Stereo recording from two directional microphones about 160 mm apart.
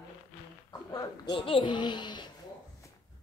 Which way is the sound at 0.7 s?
25° left (ahead or behind).